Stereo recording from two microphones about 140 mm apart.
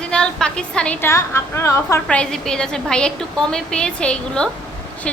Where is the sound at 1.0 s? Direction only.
20° left (ahead or behind).